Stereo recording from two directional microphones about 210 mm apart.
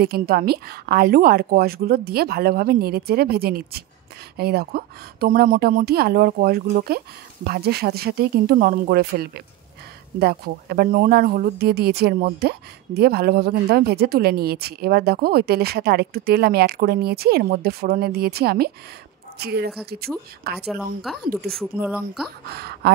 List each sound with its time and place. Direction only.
0.0 s a woman's voice: 45° right (ahead or behind)
20.5 s a woman's voice: centre (ahead or behind)
22.6 s speech: 50° right (ahead or behind)